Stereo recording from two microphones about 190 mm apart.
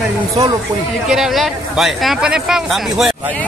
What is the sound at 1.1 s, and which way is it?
Speech, centre (ahead or behind).